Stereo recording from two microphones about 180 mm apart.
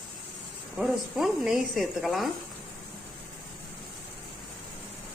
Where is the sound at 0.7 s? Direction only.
Centre (ahead or behind).